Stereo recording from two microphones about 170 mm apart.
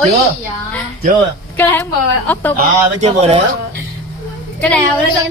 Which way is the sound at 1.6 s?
10° left (ahead or behind).